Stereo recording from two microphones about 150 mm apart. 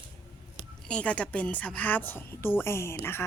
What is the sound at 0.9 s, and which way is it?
Speech, 5° left (ahead or behind).